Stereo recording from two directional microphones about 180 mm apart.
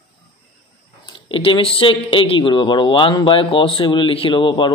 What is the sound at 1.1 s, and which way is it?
A man's voice, 30° left (ahead or behind).